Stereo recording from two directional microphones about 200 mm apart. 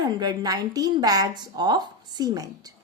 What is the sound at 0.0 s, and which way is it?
A woman's voice, 20° right (ahead or behind).